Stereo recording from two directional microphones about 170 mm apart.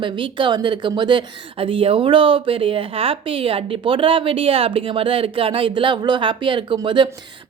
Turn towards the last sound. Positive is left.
turn(degrees=-30)  # may be behind; listen again after turning